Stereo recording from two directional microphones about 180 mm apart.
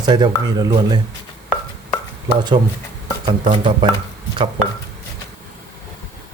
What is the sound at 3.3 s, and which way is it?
Speech, 25° right (ahead or behind).